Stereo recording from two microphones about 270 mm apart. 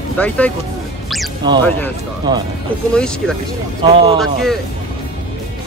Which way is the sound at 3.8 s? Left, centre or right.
Centre.